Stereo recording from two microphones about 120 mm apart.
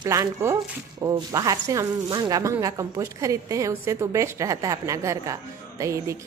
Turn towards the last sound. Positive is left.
turn(degrees=-25)  # may be behind; listen again after turning